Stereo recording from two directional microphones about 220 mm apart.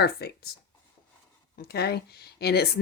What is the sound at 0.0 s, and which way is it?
Speech, 45° left (ahead or behind).